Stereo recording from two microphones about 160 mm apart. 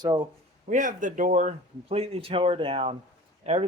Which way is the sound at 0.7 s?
55° right (ahead or behind).